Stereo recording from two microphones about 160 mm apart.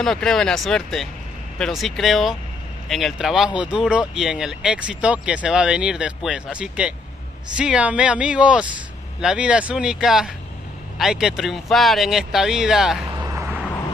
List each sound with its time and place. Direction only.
0.0 s speech: centre (ahead or behind)
13.1 s vehicle: 20° right (ahead or behind)